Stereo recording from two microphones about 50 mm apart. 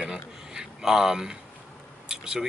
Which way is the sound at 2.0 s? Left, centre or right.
Centre.